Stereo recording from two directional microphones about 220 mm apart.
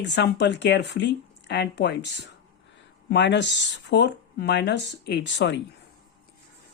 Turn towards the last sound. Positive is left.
turn(degrees=55)  # may be behind; listen again after turning